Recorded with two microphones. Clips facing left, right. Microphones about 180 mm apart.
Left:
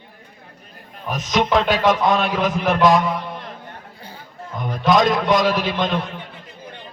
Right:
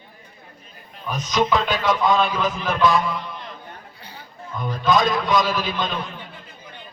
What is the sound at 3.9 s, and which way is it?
Chatter, 45° left (ahead or behind).